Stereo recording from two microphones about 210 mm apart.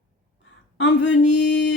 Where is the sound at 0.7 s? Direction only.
60° left (ahead or behind).